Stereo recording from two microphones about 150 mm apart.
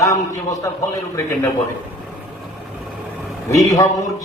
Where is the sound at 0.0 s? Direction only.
25° left (ahead or behind).